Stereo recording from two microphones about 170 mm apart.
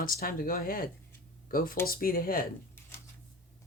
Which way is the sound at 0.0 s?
60° left (ahead or behind).